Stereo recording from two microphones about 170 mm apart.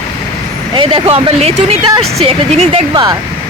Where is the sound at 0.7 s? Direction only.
30° right (ahead or behind).